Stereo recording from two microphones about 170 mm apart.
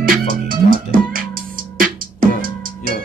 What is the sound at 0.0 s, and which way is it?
Music, 55° right (ahead or behind).